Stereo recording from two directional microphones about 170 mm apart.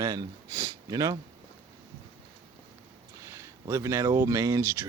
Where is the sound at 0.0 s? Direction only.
20° right (ahead or behind).